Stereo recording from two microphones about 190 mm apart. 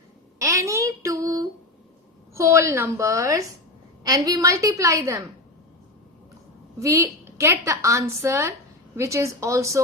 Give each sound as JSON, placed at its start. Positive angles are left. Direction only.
{"t": 0.3, "sound": "a sound", "side_deg": -15}
{"t": 2.3, "sound": "a woman's voice", "side_deg": -15}
{"t": 6.7, "sound": "a woman's voice", "side_deg": -15}